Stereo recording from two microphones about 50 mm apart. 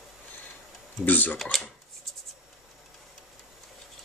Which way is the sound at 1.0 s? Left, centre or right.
Left.